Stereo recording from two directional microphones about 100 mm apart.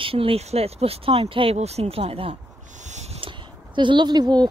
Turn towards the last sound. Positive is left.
turn(degrees=-45)  # may be behind; listen again after turning